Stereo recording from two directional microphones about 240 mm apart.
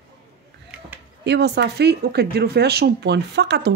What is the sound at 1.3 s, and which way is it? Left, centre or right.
Speech, right.